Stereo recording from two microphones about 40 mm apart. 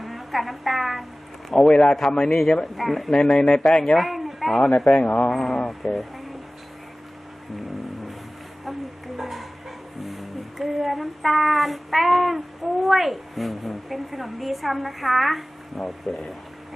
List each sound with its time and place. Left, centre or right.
0.0 s a sound: centre
1.7 s a man's voice: left
2.7 s child singing: centre
3.1 s speech: centre
3.9 s speech: centre
4.9 s a man's voice: left
5.3 s child singing: centre
9.1 s bow-wow: centre
10.0 s child singing: centre